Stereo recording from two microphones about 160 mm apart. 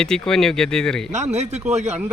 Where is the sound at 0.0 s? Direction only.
5° left (ahead or behind).